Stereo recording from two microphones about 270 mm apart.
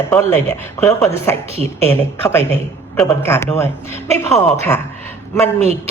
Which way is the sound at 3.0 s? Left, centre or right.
Centre.